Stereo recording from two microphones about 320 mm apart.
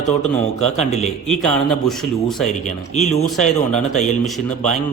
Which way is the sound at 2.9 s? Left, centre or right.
Left.